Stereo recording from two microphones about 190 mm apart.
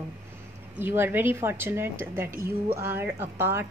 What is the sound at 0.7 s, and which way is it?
A woman's voice, 10° right (ahead or behind).